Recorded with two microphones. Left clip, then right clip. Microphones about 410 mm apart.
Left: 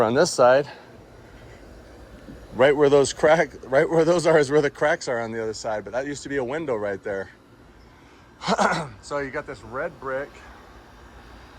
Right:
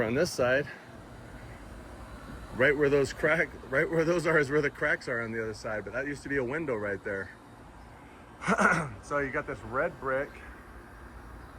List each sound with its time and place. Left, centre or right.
0.0 s speech: left
2.6 s speech: centre
8.4 s speech: centre